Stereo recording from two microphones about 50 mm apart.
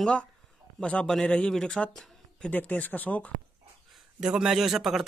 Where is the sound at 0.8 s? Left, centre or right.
Left.